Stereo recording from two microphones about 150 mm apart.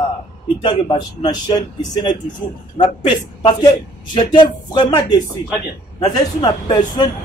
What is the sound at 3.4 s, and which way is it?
A man's voice, 30° left (ahead or behind).